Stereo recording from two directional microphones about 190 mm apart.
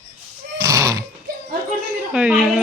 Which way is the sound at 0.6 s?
15° right (ahead or behind).